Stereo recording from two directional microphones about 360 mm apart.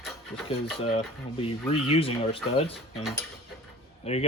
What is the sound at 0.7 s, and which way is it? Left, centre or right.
Speech, centre.